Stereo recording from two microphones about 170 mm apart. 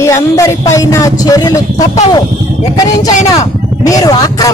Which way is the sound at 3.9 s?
20° left (ahead or behind).